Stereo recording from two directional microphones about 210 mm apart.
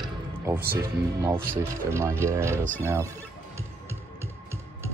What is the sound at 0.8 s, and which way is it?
Speech, 15° right (ahead or behind).